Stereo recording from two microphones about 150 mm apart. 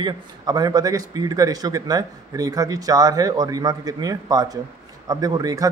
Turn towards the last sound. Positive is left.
turn(degrees=-25)  # may be behind; listen again after turning